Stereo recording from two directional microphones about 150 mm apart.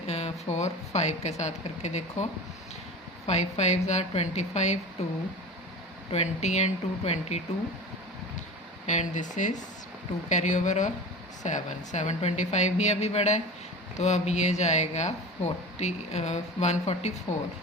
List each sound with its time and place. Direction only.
0.0 s speech: 45° left (ahead or behind)
3.2 s speech: 45° left (ahead or behind)
8.9 s speech: 55° left (ahead or behind)